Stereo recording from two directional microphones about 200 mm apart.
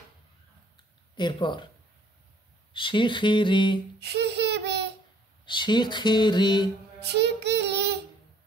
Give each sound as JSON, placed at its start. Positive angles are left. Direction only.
{"t": 1.1, "sound": "speech", "side_deg": 25}
{"t": 2.7, "sound": "speech", "side_deg": 25}
{"t": 4.0, "sound": "child singing", "side_deg": -55}
{"t": 5.4, "sound": "speech", "side_deg": 25}
{"t": 7.0, "sound": "child singing", "side_deg": -55}